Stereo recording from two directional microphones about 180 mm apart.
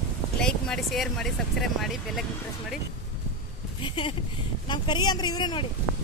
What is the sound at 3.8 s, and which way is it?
A man's voice, 25° left (ahead or behind).